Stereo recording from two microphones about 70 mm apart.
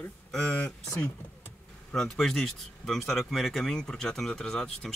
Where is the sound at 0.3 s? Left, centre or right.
Centre.